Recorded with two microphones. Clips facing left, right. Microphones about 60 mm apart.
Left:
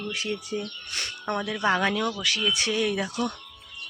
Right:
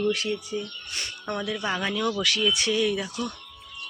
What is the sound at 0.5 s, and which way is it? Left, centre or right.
Speech, left.